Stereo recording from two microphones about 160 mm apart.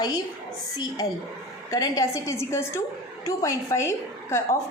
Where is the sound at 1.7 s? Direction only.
20° left (ahead or behind).